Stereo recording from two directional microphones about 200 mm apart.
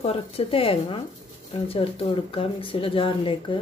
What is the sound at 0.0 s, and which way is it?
Speech, 30° left (ahead or behind).